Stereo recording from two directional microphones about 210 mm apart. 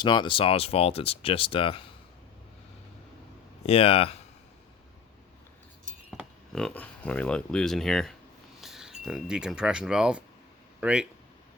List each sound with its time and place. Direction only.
0.0 s speech: 20° left (ahead or behind)
3.7 s speech: 30° left (ahead or behind)
6.1 s speech: centre (ahead or behind)